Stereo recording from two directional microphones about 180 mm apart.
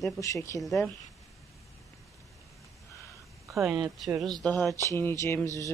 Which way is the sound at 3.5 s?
15° right (ahead or behind).